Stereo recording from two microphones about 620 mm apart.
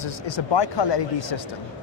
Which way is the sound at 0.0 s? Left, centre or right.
Left.